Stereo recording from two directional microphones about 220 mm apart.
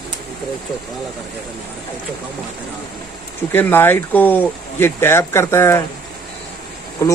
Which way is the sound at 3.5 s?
10° left (ahead or behind).